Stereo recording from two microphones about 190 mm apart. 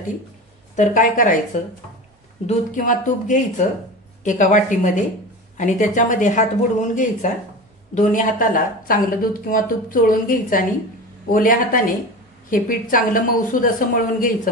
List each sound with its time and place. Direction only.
0.7 s speech: 45° left (ahead or behind)
2.4 s speech: 45° left (ahead or behind)